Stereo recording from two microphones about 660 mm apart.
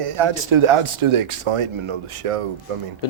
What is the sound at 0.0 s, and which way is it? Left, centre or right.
Speech, right.